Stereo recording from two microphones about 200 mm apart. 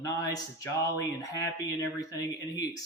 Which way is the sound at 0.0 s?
15° left (ahead or behind).